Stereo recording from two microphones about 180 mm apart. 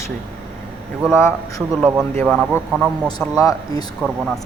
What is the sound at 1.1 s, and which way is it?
Speech, 15° left (ahead or behind).